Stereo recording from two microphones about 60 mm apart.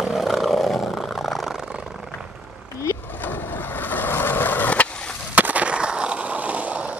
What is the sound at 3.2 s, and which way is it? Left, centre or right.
Skateboard, left.